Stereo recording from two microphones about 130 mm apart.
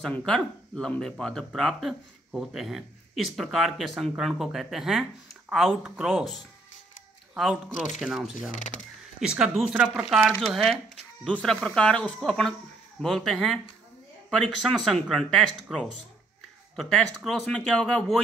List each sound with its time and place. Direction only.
0.0 s speech: 5° left (ahead or behind)
8.0 s speech: 5° right (ahead or behind)
8.5 s speech: 70° left (ahead or behind)
9.2 s speech: 5° right (ahead or behind)